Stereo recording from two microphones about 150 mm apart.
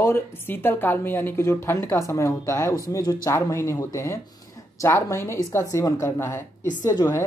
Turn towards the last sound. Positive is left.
turn(degrees=25)  # may be behind; listen again after turning